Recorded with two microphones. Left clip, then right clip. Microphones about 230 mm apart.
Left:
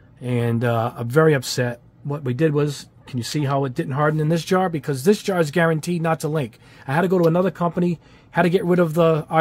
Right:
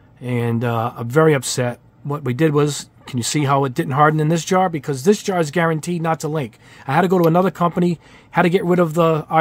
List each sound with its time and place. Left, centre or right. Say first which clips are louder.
0.2 s speech: right 1 dB; centre